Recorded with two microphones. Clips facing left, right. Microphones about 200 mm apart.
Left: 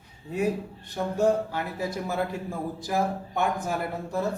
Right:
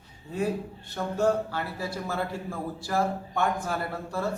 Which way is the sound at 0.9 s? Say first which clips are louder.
Left 2 dB; 15° left (ahead or behind).